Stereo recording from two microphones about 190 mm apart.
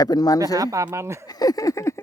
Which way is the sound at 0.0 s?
20° left (ahead or behind).